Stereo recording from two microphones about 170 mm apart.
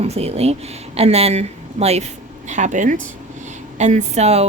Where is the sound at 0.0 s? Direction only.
35° right (ahead or behind).